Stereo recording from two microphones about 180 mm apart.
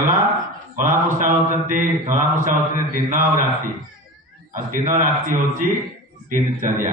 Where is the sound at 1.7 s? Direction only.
45° right (ahead or behind).